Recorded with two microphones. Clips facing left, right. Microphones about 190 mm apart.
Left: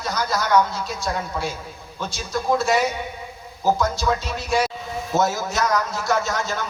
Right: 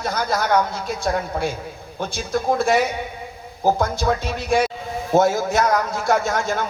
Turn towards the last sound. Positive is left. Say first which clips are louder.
# right 3 dB
turn(degrees=-55)  # may be behind; listen again after turning